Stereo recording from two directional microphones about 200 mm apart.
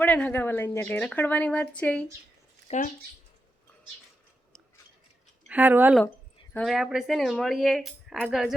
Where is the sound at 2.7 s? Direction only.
30° left (ahead or behind).